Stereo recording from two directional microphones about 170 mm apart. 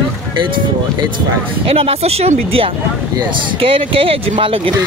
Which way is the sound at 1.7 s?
35° right (ahead or behind).